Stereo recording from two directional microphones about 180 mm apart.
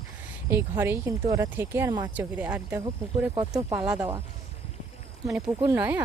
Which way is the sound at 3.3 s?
25° right (ahead or behind).